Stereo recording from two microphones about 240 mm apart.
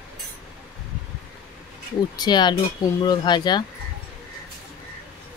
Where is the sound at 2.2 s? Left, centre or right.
Centre.